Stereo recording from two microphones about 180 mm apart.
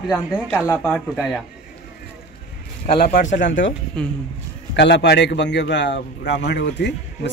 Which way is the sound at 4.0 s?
5° left (ahead or behind).